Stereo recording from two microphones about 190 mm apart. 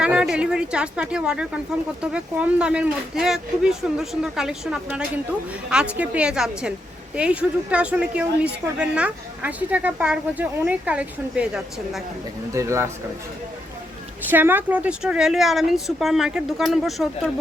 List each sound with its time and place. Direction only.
0.0 s a woman's voice: 5° right (ahead or behind)
12.5 s a woman's voice: 15° right (ahead or behind)
14.3 s speech: 10° right (ahead or behind)